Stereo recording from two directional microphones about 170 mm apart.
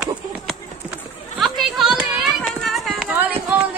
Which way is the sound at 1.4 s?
Centre (ahead or behind).